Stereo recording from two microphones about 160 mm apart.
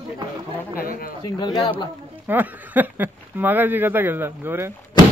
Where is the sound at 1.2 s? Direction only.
25° left (ahead or behind).